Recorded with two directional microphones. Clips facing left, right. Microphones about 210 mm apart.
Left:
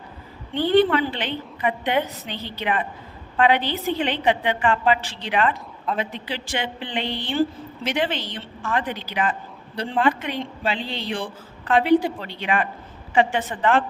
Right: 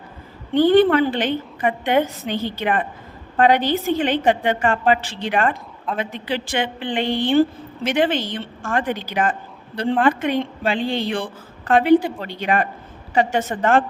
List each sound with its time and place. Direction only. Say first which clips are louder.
0.5 s a man's voice: right 4 dB; 45° right (ahead or behind)